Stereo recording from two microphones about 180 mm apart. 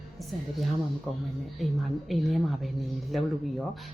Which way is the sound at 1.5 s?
Centre (ahead or behind).